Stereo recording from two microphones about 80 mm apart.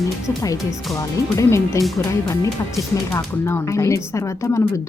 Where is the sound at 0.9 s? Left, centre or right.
Left.